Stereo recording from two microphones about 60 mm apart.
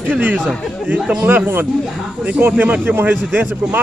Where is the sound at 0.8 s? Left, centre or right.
Right.